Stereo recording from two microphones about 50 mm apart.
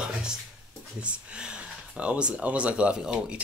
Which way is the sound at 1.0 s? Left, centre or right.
Right.